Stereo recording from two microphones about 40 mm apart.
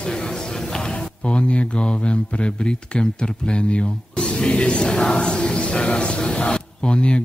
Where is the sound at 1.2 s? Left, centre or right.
Left.